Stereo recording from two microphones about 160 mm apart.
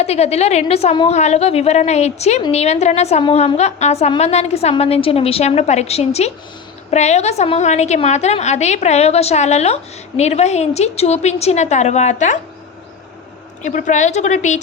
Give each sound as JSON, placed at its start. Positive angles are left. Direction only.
{"t": 0.0, "sound": "a woman's voice", "side_deg": 40}
{"t": 13.6, "sound": "a woman's voice", "side_deg": 50}